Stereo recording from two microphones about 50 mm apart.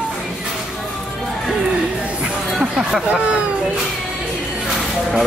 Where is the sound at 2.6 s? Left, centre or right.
Centre.